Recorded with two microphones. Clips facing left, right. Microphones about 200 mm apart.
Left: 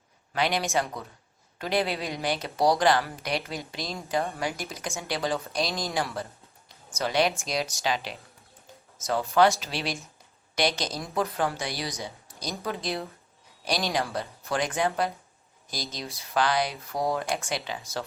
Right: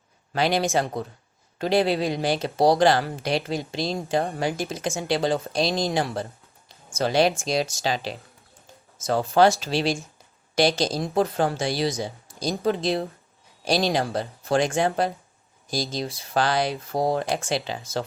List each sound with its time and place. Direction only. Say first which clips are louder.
0.3 s speech: right 4 dB; 30° right (ahead or behind)